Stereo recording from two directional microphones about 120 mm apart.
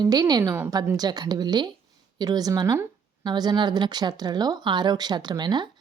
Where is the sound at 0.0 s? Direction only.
35° right (ahead or behind).